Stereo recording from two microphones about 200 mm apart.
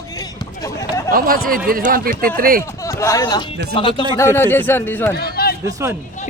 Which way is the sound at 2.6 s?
15° left (ahead or behind).